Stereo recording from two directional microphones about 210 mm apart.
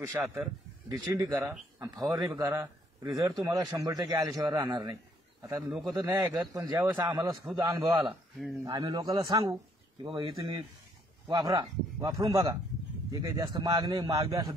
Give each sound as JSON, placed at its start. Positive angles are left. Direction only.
{"t": 0.2, "sound": "speech", "side_deg": -10}
{"t": 5.7, "sound": "a man's voice", "side_deg": 0}
{"t": 5.9, "sound": "a man's voice", "side_deg": -15}